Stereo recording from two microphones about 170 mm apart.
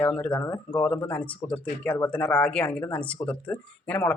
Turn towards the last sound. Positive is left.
turn(degrees=10)  # may be behind; listen again after turning